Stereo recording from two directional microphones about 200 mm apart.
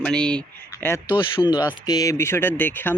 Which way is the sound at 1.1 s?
20° left (ahead or behind).